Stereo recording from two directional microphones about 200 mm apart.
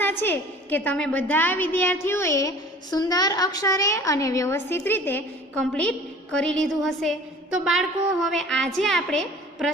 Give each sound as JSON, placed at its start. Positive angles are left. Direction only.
{"t": 0.2, "sound": "a woman's voice", "side_deg": 10}